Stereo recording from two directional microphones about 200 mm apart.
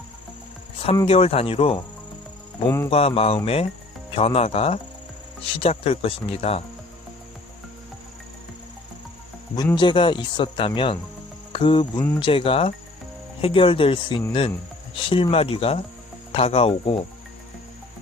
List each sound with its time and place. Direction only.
0.9 s speech: 30° left (ahead or behind)
2.6 s music: 15° left (ahead or behind)
2.9 s speech: 30° left (ahead or behind)
9.6 s speech: 20° left (ahead or behind)